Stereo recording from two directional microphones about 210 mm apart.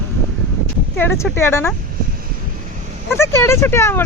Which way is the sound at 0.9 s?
10° left (ahead or behind).